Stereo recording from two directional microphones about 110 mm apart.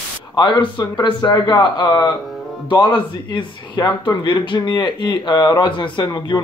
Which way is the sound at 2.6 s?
50° left (ahead or behind).